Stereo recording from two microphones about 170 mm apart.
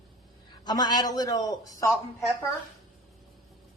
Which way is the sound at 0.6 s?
25° left (ahead or behind).